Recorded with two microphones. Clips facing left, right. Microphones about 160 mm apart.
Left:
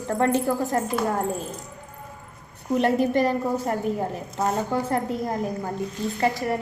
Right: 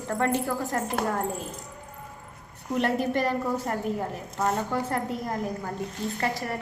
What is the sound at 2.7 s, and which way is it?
A woman's voice, 20° left (ahead or behind).